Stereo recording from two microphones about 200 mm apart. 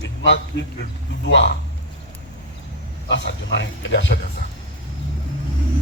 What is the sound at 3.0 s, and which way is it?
Speech, 65° left (ahead or behind).